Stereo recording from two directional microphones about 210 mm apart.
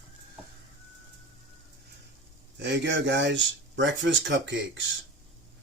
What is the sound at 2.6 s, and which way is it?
Speech, 55° right (ahead or behind).